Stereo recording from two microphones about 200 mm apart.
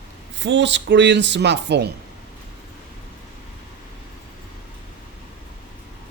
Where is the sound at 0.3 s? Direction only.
65° right (ahead or behind).